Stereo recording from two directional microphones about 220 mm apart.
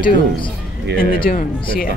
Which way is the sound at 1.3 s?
40° left (ahead or behind).